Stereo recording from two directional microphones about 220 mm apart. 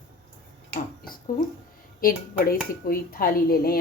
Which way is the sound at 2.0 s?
40° left (ahead or behind).